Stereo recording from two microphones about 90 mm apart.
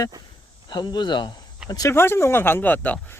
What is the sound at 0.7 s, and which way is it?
Speech, 55° left (ahead or behind).